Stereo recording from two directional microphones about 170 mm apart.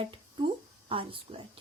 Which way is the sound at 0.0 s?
30° right (ahead or behind).